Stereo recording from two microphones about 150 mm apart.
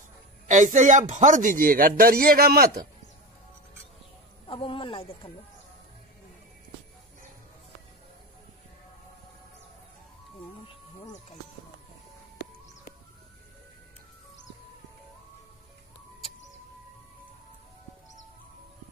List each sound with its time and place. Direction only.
0.5 s speech: 55° right (ahead or behind); by 2.8 s 90° right
4.5 s speech: 35° left (ahead or behind)
10.7 s music: 35° left (ahead or behind)